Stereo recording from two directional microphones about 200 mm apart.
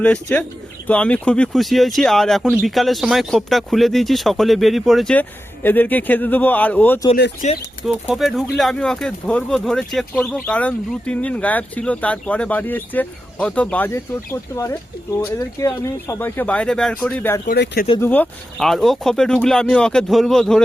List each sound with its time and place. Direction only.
0.0 s speech: 5° left (ahead or behind)
7.4 s speech: 35° left (ahead or behind)
7.9 s speech: 5° right (ahead or behind)
17.4 s speech: 50° left (ahead or behind)
18.0 s speech: 10° left (ahead or behind)